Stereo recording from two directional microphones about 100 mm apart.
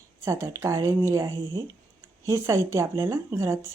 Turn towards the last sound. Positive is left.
turn(degrees=-30)  # may be behind; listen again after turning